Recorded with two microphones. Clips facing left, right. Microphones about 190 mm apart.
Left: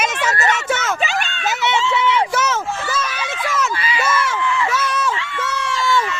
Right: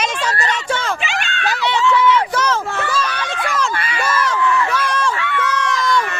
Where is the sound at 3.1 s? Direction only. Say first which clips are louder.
Right 1 dB; 5° left (ahead or behind).